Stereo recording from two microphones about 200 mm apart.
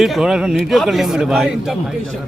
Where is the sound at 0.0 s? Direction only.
Centre (ahead or behind).